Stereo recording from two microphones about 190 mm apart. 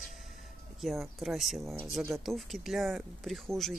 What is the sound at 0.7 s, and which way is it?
Speech, centre (ahead or behind).